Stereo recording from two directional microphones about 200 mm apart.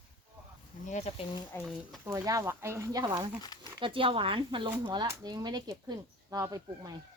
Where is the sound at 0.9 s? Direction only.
35° left (ahead or behind).